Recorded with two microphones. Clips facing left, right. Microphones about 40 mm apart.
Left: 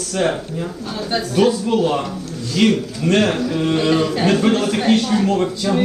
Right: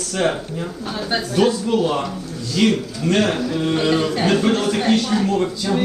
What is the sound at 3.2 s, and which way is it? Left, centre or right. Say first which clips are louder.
A woman's voice: left 2 dB; centre.